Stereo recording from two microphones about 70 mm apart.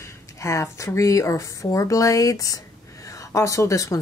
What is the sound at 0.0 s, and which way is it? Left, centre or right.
A woman's voice, left.